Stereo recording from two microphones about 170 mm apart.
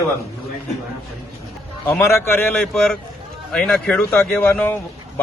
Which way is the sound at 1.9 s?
15° left (ahead or behind).